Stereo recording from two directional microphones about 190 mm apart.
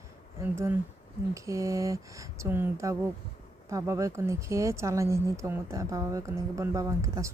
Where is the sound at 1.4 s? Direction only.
15° right (ahead or behind).